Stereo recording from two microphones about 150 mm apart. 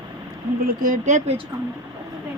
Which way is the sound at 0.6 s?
60° right (ahead or behind).